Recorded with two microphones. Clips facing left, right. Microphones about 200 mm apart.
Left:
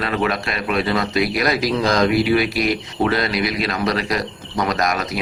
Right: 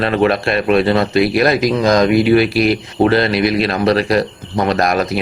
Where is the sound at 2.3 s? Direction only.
65° right (ahead or behind).